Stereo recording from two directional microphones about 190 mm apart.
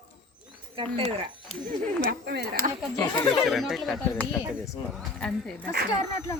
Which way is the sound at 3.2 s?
Centre (ahead or behind).